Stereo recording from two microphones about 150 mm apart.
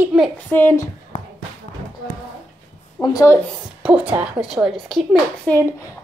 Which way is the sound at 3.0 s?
25° left (ahead or behind).